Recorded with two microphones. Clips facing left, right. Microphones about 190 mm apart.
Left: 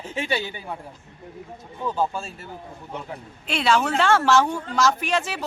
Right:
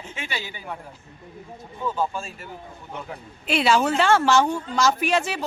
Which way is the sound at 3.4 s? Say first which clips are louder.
Right 2 dB; 5° right (ahead or behind).